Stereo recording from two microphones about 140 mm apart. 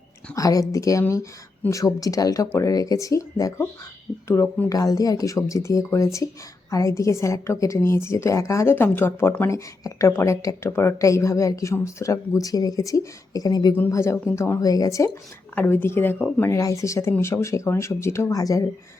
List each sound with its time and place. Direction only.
0.3 s a woman's voice: 25° left (ahead or behind)
4.7 s speech: 25° left (ahead or behind)
13.7 s a woman's voice: 15° left (ahead or behind)